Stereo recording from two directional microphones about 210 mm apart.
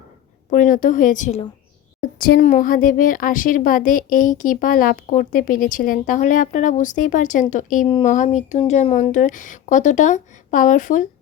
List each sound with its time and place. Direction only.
0.5 s speech: 40° left (ahead or behind)
7.9 s speech: 25° left (ahead or behind)
8.1 s speech: 35° left (ahead or behind)